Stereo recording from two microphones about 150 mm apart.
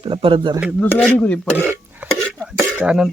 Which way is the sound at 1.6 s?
15° right (ahead or behind).